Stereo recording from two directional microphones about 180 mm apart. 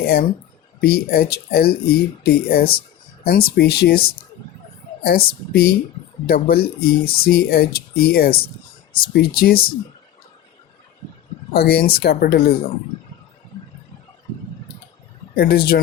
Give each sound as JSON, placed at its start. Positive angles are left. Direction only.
{"t": 0.0, "sound": "speech", "side_deg": 60}
{"t": 11.5, "sound": "speech", "side_deg": 60}
{"t": 15.4, "sound": "speech", "side_deg": 60}